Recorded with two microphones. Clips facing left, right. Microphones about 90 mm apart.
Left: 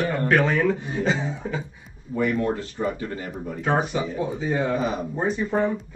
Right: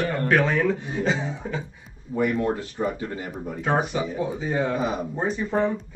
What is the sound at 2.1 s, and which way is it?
Speech, 15° right (ahead or behind).